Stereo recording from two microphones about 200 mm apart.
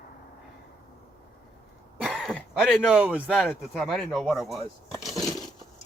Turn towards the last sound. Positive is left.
turn(degrees=0)  # may be behind; listen again after turning